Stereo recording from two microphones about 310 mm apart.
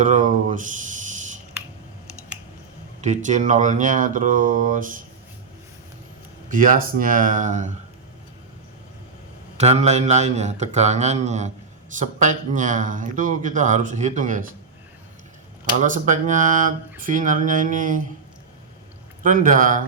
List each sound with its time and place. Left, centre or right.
0.0 s a sound: right
3.0 s speech: right
6.5 s speech: right
9.6 s speech: right
15.8 s speech: right
19.2 s speech: right